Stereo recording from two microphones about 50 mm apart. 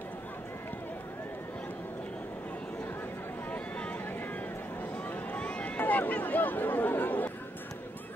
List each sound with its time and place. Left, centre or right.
5.3 s run: left
5.8 s speech: left